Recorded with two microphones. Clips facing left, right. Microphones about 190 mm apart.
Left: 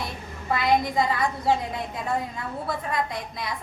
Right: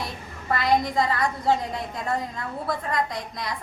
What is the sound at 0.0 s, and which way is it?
A woman's voice, centre (ahead or behind).